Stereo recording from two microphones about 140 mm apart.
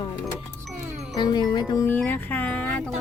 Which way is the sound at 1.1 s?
30° left (ahead or behind).